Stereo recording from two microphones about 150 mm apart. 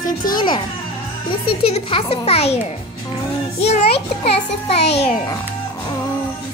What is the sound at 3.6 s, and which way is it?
A child's voice, 40° left (ahead or behind).